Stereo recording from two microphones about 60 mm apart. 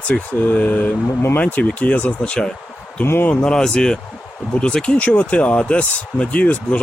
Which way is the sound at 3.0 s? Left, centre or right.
Left.